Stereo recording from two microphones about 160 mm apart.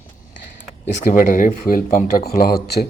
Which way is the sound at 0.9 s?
55° left (ahead or behind).